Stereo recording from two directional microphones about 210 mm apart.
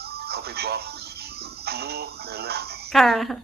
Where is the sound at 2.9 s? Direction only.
Centre (ahead or behind).